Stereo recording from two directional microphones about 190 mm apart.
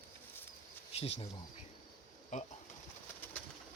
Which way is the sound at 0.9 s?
30° left (ahead or behind).